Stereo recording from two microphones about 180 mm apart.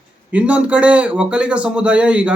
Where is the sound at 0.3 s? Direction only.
10° right (ahead or behind).